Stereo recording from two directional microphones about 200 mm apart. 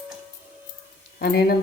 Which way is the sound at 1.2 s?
50° left (ahead or behind).